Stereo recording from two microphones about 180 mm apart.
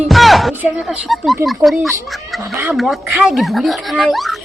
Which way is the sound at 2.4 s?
10° right (ahead or behind).